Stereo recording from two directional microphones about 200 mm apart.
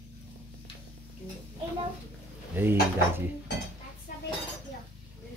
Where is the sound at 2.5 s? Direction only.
10° right (ahead or behind).